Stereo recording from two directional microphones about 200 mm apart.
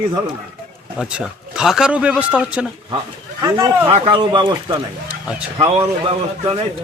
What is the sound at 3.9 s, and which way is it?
A man's voice, 25° right (ahead or behind).